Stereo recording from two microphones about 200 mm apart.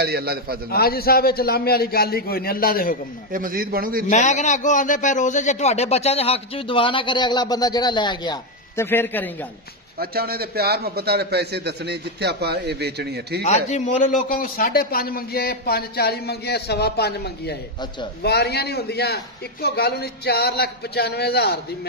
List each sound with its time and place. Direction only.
0.0 s a man's voice: 50° right (ahead or behind)
0.7 s a man's voice: 50° left (ahead or behind)
3.3 s a man's voice: 45° right (ahead or behind)
4.1 s a man's voice: 35° left (ahead or behind); by 9.3 s 10° left (ahead or behind)
9.9 s a man's voice: 50° right (ahead or behind)
13.4 s a man's voice: 35° left (ahead or behind); by 21.5 s 55° left (ahead or behind)